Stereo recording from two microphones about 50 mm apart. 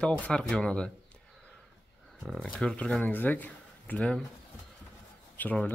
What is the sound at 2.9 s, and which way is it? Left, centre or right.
Speech, left.